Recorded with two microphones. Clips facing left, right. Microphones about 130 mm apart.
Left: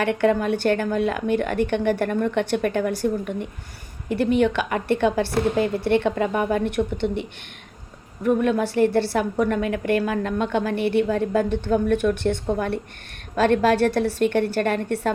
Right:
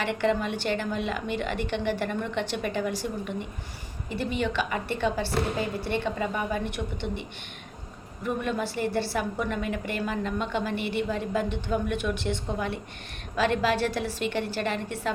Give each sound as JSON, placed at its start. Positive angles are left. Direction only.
{"t": 0.0, "sound": "a woman's voice", "side_deg": 55}
{"t": 8.2, "sound": "a woman's voice", "side_deg": 55}